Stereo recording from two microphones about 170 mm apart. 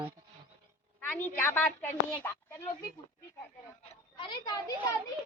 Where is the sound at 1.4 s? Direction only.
10° left (ahead or behind).